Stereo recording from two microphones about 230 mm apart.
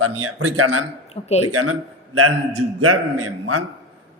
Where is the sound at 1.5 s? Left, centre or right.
Right.